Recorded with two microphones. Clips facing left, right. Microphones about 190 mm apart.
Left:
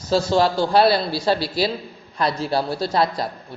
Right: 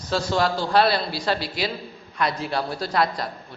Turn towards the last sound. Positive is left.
turn(degrees=30)  # may be behind; listen again after turning